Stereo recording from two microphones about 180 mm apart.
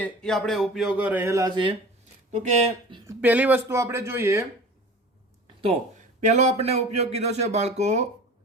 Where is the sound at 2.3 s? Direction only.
40° right (ahead or behind).